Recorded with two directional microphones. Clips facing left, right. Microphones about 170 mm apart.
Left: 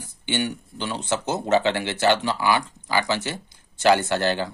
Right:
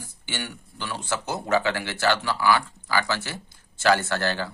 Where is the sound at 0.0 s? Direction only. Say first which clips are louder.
Left 8 dB; 20° left (ahead or behind).